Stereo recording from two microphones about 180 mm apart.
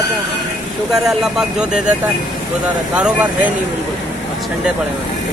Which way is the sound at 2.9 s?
5° right (ahead or behind).